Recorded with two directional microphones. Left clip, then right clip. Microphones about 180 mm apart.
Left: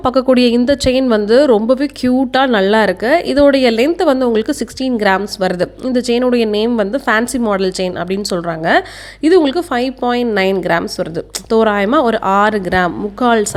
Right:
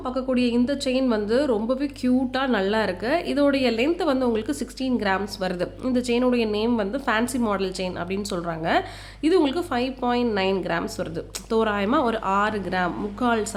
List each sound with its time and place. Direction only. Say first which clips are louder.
0.0 s a woman's voice: left 13 dB; 50° left (ahead or behind)